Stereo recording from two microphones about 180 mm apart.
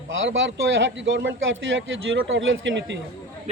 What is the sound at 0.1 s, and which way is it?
A man's voice, 90° right.